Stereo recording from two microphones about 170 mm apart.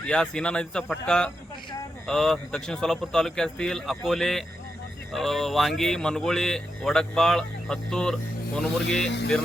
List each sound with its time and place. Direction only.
0.0 s speech: 5° left (ahead or behind)
9.0 s speech: 90° left